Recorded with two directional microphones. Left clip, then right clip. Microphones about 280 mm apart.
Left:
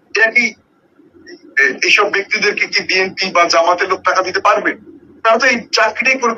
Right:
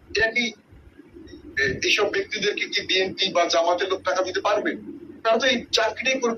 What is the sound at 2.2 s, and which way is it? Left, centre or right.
Speech, left.